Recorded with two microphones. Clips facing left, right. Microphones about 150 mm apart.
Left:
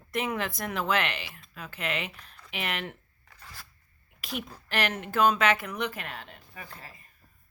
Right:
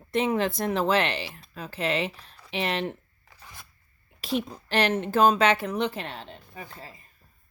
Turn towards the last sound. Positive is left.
turn(degrees=-25)  # may be behind; listen again after turning